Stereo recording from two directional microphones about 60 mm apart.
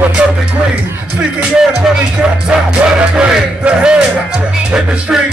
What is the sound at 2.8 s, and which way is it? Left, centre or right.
Music, centre.